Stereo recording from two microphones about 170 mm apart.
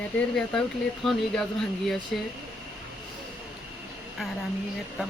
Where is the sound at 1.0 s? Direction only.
Centre (ahead or behind).